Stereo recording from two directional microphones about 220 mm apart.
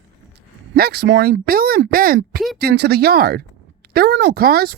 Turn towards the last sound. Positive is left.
turn(degrees=-45)  # may be behind; listen again after turning